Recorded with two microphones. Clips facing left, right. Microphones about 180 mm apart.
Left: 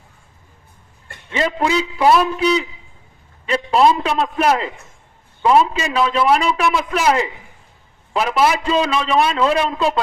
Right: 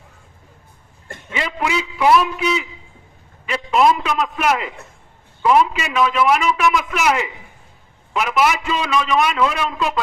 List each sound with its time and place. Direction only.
1.4 s a man's voice: 35° left (ahead or behind)